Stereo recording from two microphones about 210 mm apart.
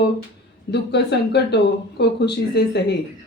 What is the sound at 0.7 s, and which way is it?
Speech, 55° left (ahead or behind).